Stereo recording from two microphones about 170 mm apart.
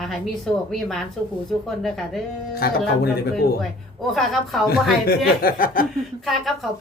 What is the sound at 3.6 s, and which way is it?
Speech, centre (ahead or behind).